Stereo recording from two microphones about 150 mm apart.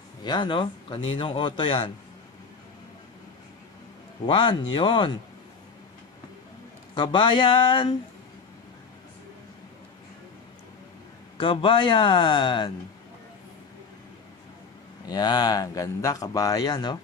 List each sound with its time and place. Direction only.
0.2 s speech: 30° left (ahead or behind)
4.3 s speech: 35° left (ahead or behind)
7.0 s speech: 35° left (ahead or behind)
11.3 s speech: 35° left (ahead or behind)
15.0 s speech: 30° left (ahead or behind)